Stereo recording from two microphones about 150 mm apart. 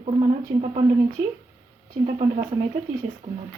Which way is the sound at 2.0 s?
45° right (ahead or behind).